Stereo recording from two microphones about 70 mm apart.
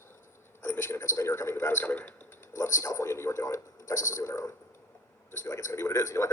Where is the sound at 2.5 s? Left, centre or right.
Left.